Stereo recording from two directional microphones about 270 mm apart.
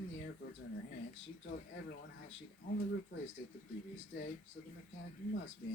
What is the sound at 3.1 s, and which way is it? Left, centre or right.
Speech, left.